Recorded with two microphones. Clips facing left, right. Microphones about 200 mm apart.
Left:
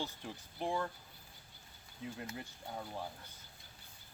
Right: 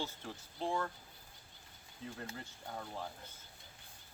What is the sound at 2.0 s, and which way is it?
Speech, 15° left (ahead or behind).